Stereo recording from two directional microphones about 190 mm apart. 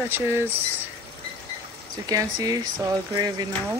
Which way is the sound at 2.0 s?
20° right (ahead or behind).